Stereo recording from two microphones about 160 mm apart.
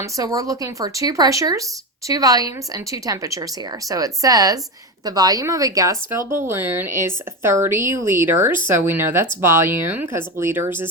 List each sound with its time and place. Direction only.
0.0 s a woman's voice: 20° right (ahead or behind)